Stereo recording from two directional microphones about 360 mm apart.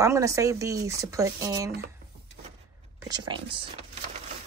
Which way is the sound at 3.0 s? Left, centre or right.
Centre.